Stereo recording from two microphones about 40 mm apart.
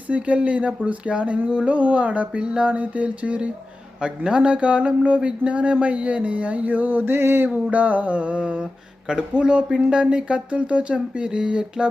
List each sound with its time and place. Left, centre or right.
0.1 s speech: right
7.5 s speech: right